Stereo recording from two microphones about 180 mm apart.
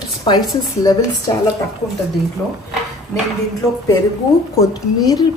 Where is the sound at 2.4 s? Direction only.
10° left (ahead or behind).